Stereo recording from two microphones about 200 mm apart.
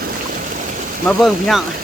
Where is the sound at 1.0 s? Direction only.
Centre (ahead or behind).